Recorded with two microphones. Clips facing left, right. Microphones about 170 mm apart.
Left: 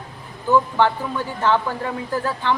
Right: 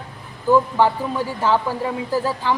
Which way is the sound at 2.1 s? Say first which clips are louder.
Right 1 dB; 10° right (ahead or behind).